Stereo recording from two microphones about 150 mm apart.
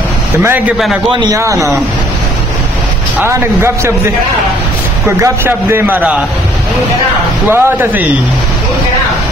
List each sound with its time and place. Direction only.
1.1 s speech: 25° right (ahead or behind)
3.2 s a man's voice: 15° right (ahead or behind)
5.0 s a man's voice: 20° right (ahead or behind)
7.5 s a man's voice: 10° right (ahead or behind)